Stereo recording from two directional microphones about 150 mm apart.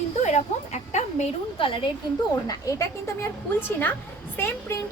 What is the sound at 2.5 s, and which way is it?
Speech, 20° left (ahead or behind).